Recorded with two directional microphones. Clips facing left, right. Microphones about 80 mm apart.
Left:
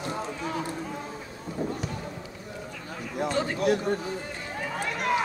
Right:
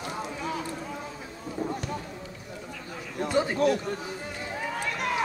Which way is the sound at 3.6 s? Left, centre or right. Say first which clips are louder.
Even; left.